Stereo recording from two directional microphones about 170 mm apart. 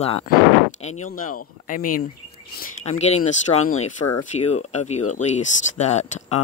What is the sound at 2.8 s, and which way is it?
Speech, 40° left (ahead or behind).